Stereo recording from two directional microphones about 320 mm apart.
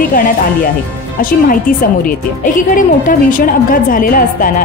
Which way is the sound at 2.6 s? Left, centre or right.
Left.